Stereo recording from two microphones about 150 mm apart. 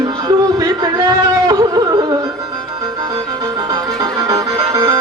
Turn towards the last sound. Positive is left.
turn(degrees=-25)  # may be behind; listen again after turning